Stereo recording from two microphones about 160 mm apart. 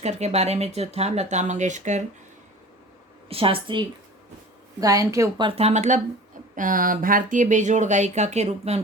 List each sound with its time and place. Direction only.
0.0 s speech: 45° right (ahead or behind)
3.2 s a woman's voice: 35° right (ahead or behind)
4.8 s a woman's voice: 20° right (ahead or behind)
5.5 s speech: 40° right (ahead or behind)
6.6 s speech: 60° right (ahead or behind); by 8.8 s 40° right (ahead or behind)